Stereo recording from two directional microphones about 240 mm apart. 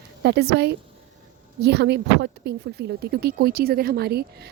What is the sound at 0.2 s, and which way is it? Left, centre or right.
A woman's voice, right.